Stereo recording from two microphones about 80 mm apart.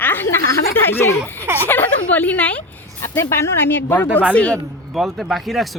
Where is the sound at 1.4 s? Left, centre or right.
Right.